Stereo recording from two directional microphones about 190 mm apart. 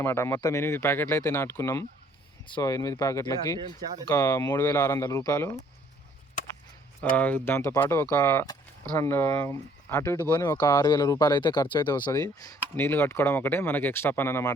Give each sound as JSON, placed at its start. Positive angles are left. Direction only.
{"t": 0.0, "sound": "speech", "side_deg": 10}
{"t": 7.2, "sound": "speech", "side_deg": 10}